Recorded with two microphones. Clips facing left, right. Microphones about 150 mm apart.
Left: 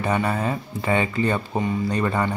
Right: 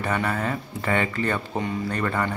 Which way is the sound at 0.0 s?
15° left (ahead or behind).